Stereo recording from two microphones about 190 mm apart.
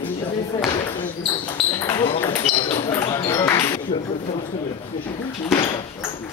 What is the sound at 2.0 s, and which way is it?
Ping, 30° left (ahead or behind).